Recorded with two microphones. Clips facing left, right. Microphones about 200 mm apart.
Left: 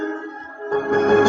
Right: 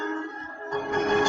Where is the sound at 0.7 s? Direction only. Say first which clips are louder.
Left 9 dB; 55° left (ahead or behind).